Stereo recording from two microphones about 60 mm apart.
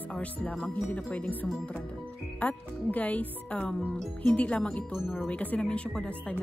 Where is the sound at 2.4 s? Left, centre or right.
Left.